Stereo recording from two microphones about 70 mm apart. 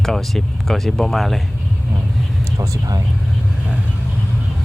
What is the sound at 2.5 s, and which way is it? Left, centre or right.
Speech, right.